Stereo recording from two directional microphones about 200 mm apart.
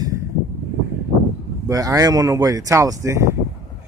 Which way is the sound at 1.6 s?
15° right (ahead or behind).